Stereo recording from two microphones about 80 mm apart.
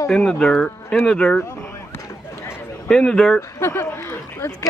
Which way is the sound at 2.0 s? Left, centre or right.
Left.